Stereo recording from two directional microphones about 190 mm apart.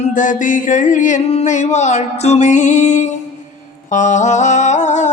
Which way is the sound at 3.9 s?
40° left (ahead or behind).